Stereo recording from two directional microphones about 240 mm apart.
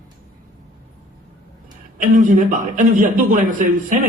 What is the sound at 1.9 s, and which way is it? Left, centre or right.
A man's voice, right.